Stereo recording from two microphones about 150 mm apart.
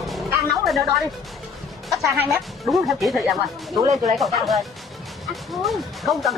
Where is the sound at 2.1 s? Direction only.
20° right (ahead or behind).